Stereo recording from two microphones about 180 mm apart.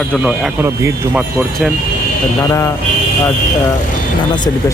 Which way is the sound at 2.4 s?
15° left (ahead or behind).